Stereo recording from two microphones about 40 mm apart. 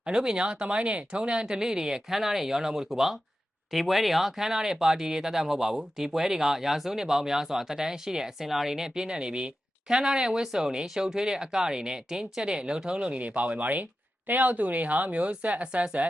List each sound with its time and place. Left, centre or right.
0.0 s speech: centre
9.0 s speech: right
13.1 s speech: right